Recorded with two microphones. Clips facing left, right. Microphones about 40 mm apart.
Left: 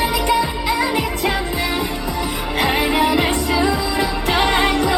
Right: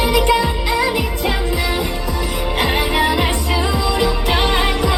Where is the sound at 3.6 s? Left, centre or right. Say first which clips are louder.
Right 1 dB; right.